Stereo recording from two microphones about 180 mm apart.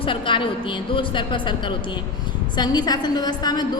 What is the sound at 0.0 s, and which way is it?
A woman's voice, 30° left (ahead or behind).